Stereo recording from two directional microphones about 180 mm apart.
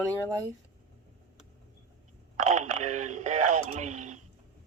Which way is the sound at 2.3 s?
40° right (ahead or behind).